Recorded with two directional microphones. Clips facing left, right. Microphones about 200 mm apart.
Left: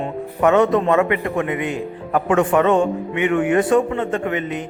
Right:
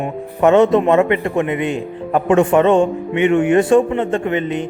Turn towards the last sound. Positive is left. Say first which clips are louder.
# right 4 dB
turn(degrees=-25)  # may be behind; listen again after turning